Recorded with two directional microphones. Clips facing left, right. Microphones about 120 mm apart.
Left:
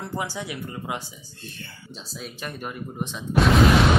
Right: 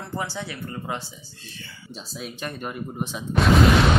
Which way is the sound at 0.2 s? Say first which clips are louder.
Even; 15° left (ahead or behind).